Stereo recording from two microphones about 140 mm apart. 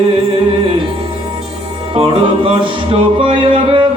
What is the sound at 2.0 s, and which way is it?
Music, 40° right (ahead or behind).